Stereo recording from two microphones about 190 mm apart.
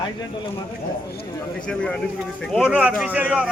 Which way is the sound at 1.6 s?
5° left (ahead or behind).